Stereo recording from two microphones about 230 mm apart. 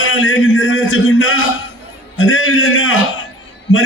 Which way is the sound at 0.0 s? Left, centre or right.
Left.